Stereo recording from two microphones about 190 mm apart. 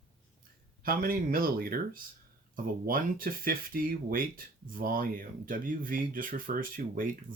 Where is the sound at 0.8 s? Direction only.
50° right (ahead or behind).